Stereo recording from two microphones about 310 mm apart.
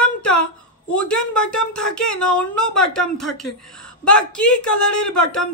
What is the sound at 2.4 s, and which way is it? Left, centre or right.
Speech, centre.